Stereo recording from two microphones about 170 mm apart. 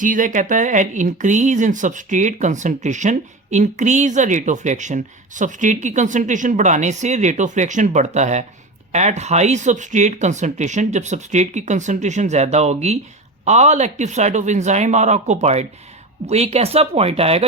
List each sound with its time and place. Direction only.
0.0 s speech: 50° right (ahead or behind)